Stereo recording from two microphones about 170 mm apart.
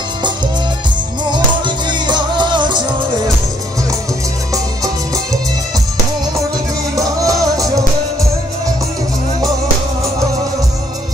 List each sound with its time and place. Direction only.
1.9 s music: 25° right (ahead or behind)
4.8 s music: 20° right (ahead or behind)
7.0 s music: 20° right (ahead or behind)